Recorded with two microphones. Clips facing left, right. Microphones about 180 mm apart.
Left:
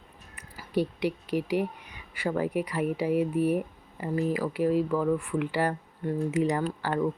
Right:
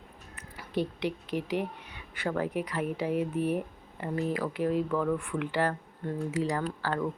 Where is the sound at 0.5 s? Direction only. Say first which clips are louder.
Left 3 dB; 10° left (ahead or behind).